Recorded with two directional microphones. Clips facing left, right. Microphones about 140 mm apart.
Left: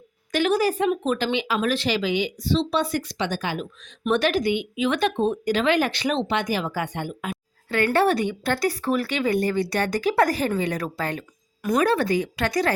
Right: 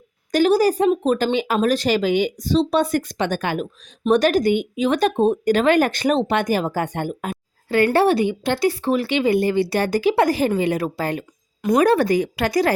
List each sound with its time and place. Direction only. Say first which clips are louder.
0.3 s speech: right 5 dB; 35° right (ahead or behind); by 3.7 s 55° right (ahead or behind)
4.0 s speech: right 5 dB; 40° right (ahead or behind)
7.9 s speech: right 4 dB; 30° right (ahead or behind)
11.8 s speech: right 5 dB; 40° right (ahead or behind)